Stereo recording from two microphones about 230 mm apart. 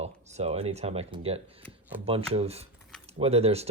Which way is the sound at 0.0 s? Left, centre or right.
Right.